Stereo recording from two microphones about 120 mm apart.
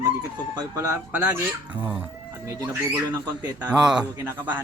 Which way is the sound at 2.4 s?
25° right (ahead or behind).